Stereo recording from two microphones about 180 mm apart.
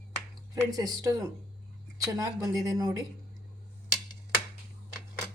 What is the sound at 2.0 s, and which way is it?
Speech, 20° right (ahead or behind).